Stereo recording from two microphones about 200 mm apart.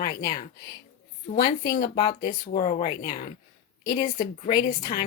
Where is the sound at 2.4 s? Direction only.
45° left (ahead or behind).